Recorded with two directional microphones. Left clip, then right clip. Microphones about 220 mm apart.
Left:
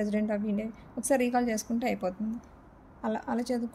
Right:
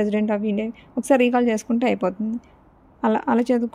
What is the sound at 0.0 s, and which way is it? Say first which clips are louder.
A woman's voice: right 9 dB; 35° right (ahead or behind).